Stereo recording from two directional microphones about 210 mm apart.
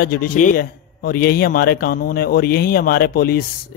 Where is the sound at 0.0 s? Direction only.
45° left (ahead or behind).